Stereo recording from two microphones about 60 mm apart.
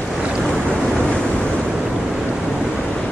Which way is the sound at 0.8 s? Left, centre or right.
Centre.